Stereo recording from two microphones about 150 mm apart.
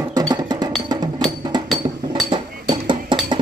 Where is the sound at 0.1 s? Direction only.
25° right (ahead or behind).